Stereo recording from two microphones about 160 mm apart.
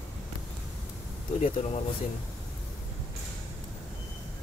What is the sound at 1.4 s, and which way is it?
Speech, 45° left (ahead or behind).